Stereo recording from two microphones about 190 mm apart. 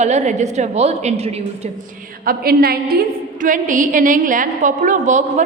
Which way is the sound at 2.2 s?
50° right (ahead or behind).